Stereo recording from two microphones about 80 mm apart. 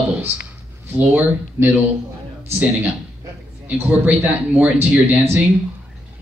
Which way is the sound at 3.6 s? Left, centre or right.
Right.